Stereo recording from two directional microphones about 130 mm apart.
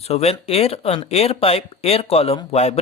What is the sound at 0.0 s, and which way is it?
Speech, 55° left (ahead or behind).